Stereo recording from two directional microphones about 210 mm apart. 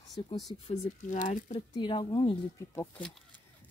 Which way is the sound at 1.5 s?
20° left (ahead or behind).